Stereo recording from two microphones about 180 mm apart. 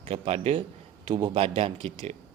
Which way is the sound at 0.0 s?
35° right (ahead or behind).